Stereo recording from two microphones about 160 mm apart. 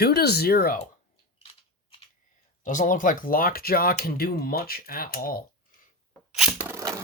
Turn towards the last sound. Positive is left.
turn(degrees=-20)  # may be behind; listen again after turning